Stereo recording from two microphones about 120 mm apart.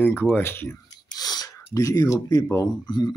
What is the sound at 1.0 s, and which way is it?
Sneeze, 35° left (ahead or behind).